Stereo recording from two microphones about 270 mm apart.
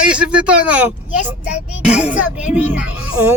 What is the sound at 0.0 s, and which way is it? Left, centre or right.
Speech, centre.